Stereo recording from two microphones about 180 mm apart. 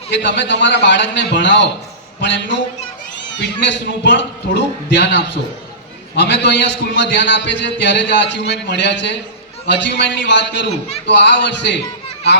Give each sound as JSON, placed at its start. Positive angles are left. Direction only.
{"t": 0.1, "sound": "a man's voice", "side_deg": 80}